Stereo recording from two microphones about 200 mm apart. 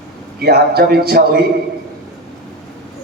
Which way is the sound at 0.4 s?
55° right (ahead or behind).